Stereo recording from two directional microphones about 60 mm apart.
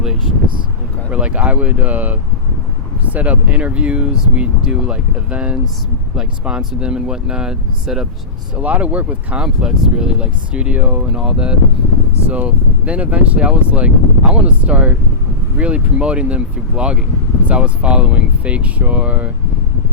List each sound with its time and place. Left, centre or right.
0.0 s a sound: centre
1.1 s speech: right
8.5 s speech: right
9.4 s speech: centre; by 11.0 s right
11.0 s speech: centre